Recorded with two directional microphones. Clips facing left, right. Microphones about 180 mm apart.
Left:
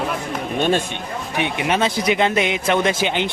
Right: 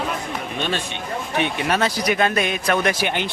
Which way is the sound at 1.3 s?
15° left (ahead or behind).